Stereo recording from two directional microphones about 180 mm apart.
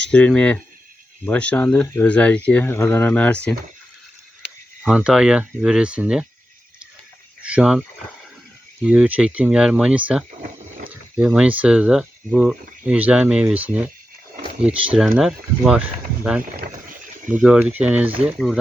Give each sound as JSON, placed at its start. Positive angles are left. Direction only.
{"t": 0.1, "sound": "speech", "side_deg": 5}
{"t": 4.8, "sound": "speech", "side_deg": -5}
{"t": 7.4, "sound": "speech", "side_deg": -5}
{"t": 16.6, "sound": "boat", "side_deg": -50}
{"t": 17.2, "sound": "speech", "side_deg": -5}